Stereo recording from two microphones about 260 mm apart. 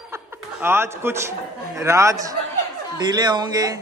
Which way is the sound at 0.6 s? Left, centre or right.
Centre.